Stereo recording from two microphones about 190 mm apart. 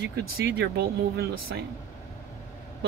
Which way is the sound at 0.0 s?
55° right (ahead or behind).